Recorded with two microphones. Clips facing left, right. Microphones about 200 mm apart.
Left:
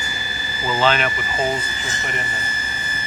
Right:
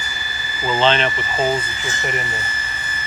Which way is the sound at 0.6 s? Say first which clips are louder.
Right 2 dB; 15° right (ahead or behind).